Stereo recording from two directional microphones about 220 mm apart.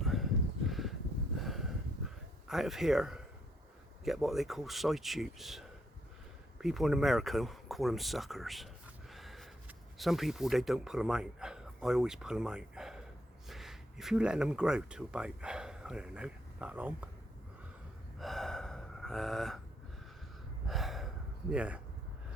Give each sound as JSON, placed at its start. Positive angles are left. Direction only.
{"t": 0.0, "sound": "a sound", "side_deg": 0}
{"t": 4.0, "sound": "speech", "side_deg": 0}
{"t": 18.2, "sound": "gasp", "side_deg": 0}
{"t": 20.7, "sound": "gasp", "side_deg": 0}
{"t": 21.5, "sound": "speech", "side_deg": -5}